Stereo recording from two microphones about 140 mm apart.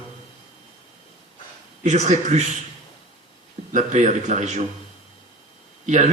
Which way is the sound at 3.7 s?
60° right (ahead or behind).